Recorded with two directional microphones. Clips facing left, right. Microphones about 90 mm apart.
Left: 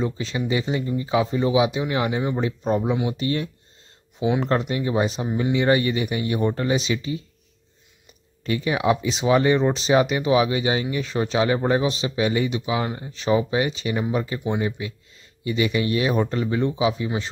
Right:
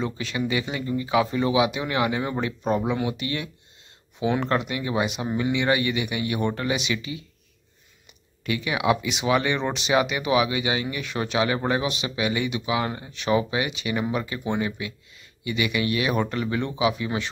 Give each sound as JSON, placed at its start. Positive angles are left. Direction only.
{"t": 0.0, "sound": "speech", "side_deg": 25}
{"t": 4.5, "sound": "speech", "side_deg": 35}
{"t": 8.5, "sound": "speech", "side_deg": 35}